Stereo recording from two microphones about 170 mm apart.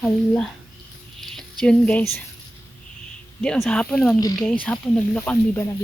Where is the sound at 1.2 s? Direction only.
5° left (ahead or behind).